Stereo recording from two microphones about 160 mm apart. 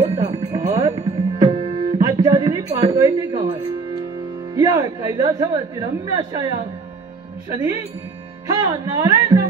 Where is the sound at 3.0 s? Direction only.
25° right (ahead or behind).